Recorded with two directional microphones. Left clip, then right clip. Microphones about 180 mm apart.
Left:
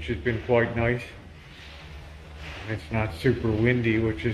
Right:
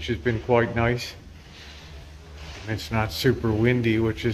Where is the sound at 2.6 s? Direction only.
10° right (ahead or behind).